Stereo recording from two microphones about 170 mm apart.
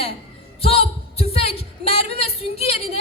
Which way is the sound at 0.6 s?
35° left (ahead or behind).